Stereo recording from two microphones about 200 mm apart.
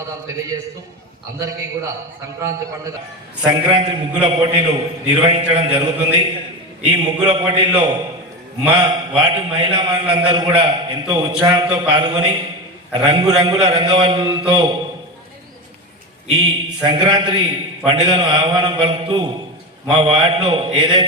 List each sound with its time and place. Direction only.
3.4 s a man's voice: 25° right (ahead or behind)
16.2 s a man's voice: 25° right (ahead or behind)